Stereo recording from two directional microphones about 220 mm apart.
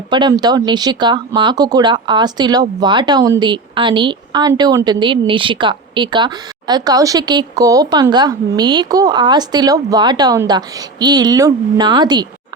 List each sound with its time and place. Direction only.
0.1 s speech: 20° right (ahead or behind)